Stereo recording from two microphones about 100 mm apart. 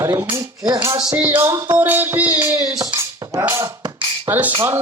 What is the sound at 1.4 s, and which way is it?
Speech, 35° right (ahead or behind).